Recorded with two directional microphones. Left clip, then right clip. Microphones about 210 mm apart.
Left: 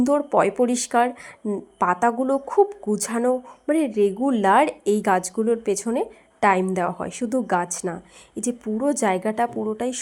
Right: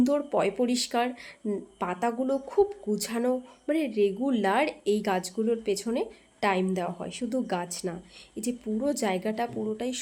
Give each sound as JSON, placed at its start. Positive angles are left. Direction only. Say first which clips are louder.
{"t": 0.0, "sound": "a woman's voice", "louder": "left 6 dB", "side_deg": 10}